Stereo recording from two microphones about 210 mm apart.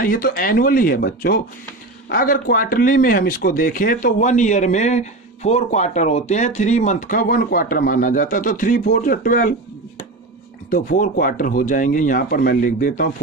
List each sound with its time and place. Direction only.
0.0 s speech: 45° left (ahead or behind)
10.7 s speech: 40° left (ahead or behind)